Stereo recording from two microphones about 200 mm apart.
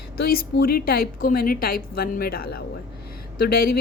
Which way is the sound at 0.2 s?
50° left (ahead or behind).